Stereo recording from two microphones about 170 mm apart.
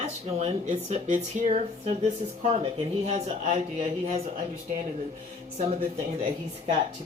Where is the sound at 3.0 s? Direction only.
40° right (ahead or behind).